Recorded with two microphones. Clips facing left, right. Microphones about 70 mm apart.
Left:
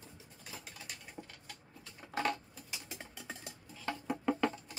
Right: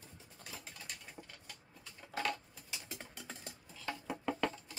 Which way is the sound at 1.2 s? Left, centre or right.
Centre.